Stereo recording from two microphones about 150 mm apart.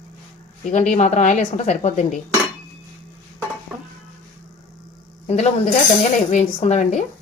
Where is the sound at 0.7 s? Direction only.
50° left (ahead or behind).